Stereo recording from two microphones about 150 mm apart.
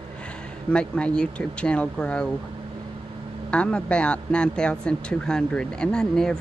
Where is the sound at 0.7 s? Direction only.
5° left (ahead or behind).